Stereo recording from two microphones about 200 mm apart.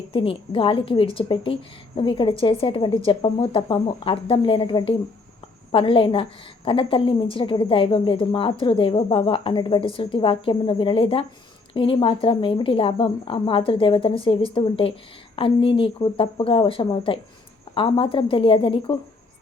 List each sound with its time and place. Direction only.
0.1 s a woman's voice: 25° left (ahead or behind)